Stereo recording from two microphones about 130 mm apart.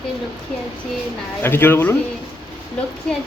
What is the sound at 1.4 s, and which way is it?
Speech, 15° left (ahead or behind).